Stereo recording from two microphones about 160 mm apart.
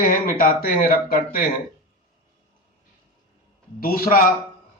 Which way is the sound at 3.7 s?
65° left (ahead or behind).